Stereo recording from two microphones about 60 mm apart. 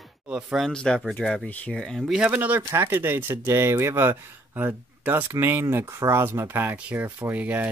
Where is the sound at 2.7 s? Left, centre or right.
Right.